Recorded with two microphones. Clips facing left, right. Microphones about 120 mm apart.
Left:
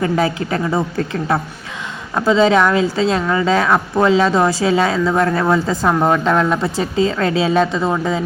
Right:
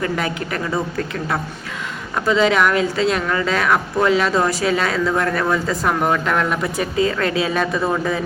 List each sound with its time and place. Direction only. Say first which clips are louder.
0.0 s a woman's voice: left 5 dB; 30° left (ahead or behind)